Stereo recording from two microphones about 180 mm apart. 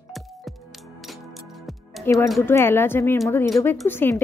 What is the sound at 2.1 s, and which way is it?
Speech, 10° left (ahead or behind).